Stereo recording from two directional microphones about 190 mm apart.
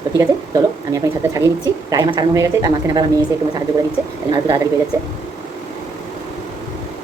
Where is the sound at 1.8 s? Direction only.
20° right (ahead or behind).